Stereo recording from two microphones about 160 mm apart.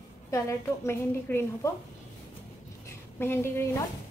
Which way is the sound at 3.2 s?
15° left (ahead or behind).